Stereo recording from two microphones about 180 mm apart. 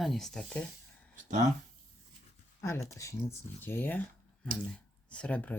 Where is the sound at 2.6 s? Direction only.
15° left (ahead or behind).